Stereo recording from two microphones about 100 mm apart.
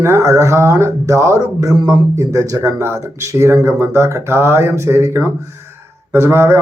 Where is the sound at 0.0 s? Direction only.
30° right (ahead or behind).